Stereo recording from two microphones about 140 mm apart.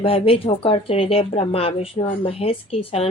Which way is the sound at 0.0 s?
40° left (ahead or behind).